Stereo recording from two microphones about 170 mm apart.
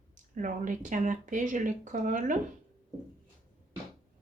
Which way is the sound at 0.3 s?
50° right (ahead or behind).